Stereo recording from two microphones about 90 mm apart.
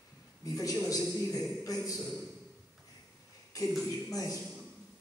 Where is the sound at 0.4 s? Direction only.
40° left (ahead or behind).